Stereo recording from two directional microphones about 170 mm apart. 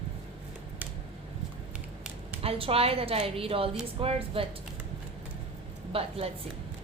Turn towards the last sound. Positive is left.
turn(degrees=-35)  # may be behind; listen again after turning